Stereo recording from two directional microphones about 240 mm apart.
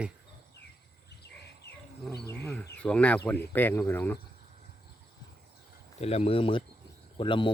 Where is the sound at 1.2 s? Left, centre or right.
Left.